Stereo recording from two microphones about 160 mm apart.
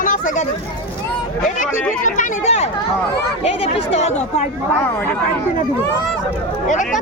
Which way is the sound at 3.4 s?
40° left (ahead or behind).